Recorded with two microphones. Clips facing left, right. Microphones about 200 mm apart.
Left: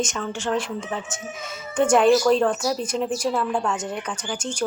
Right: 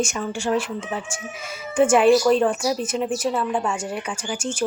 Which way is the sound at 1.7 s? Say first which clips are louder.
Right 1 dB; 5° right (ahead or behind).